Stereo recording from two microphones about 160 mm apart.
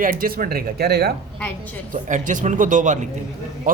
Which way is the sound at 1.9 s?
55° right (ahead or behind).